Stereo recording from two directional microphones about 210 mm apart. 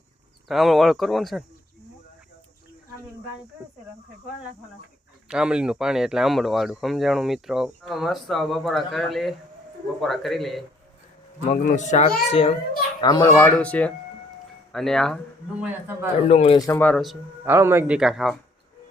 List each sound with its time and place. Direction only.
0.4 s speech: centre (ahead or behind)
5.3 s speech: 5° right (ahead or behind)
11.6 s a child's voice: 35° left (ahead or behind)
13.0 s speech: 20° left (ahead or behind); by 16.0 s 10° right (ahead or behind)
16.3 s speech: 30° left (ahead or behind)
16.6 s speech: 10° left (ahead or behind)
17.5 s speech: 10° right (ahead or behind)